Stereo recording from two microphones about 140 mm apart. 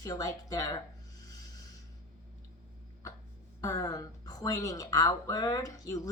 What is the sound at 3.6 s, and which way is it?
Speech, 25° left (ahead or behind).